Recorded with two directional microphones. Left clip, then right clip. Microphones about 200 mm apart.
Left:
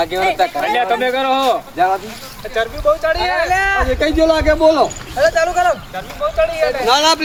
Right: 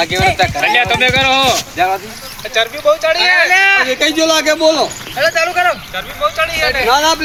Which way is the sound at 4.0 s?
15° right (ahead or behind).